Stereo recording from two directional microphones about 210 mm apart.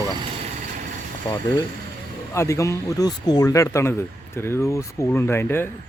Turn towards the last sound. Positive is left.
turn(degrees=10)  # may be behind; listen again after turning